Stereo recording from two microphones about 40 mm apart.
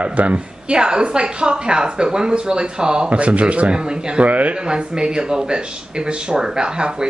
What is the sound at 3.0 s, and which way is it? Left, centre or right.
Speech, right.